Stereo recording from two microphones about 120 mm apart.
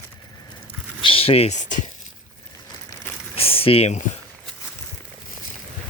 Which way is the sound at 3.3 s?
50° left (ahead or behind).